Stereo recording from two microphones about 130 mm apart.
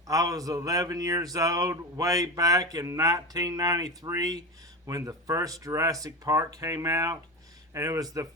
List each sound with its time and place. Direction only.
0.1 s speech: 25° right (ahead or behind)